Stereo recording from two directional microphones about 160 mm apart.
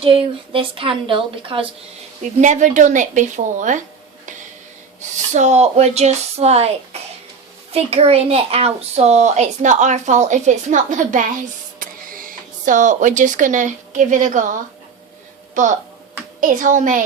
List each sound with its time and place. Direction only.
0.5 s a woman's voice: 35° right (ahead or behind)
2.2 s speech: 50° right (ahead or behind)
5.3 s speech: 45° right (ahead or behind)
7.7 s speech: 40° right (ahead or behind)
16.4 s speech: 55° right (ahead or behind)